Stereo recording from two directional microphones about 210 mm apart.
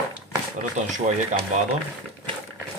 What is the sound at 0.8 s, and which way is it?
Speech, 35° right (ahead or behind).